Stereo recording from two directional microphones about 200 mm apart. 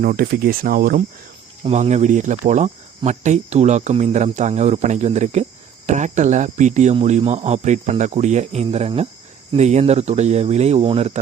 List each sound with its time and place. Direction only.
0.0 s speech: 45° right (ahead or behind)